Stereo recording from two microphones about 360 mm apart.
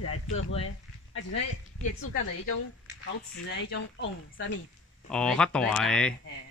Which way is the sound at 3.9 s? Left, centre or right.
Left.